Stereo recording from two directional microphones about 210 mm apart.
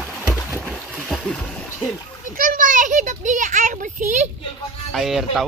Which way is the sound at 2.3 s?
40° right (ahead or behind).